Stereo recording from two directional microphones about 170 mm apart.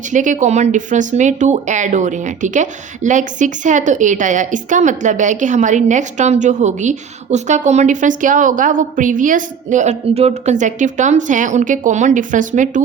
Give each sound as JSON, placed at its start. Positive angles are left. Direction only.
{"t": 0.1, "sound": "speech", "side_deg": -45}